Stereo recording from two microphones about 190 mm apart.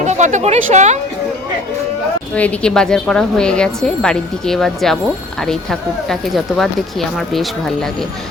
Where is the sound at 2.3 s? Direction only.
5° left (ahead or behind).